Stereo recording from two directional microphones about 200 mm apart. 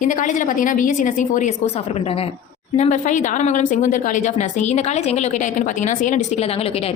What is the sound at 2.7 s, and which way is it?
Speech, 35° left (ahead or behind).